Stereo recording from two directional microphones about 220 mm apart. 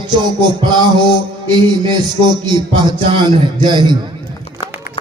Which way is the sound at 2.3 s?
20° right (ahead or behind).